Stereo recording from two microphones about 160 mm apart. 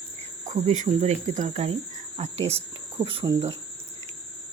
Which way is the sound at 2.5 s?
35° right (ahead or behind).